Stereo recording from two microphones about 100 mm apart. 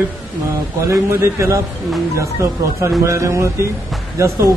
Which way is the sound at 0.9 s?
25° right (ahead or behind).